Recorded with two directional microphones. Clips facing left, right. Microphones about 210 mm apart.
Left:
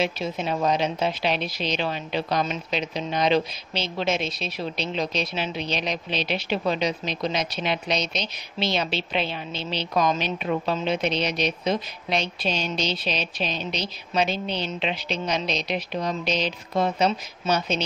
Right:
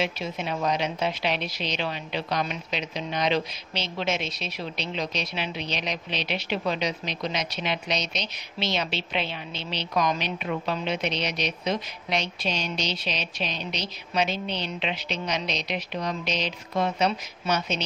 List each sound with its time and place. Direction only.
0.0 s a woman's voice: 35° left (ahead or behind)